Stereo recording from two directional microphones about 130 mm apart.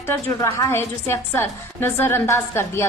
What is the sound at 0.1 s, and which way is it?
A woman's voice, 20° left (ahead or behind).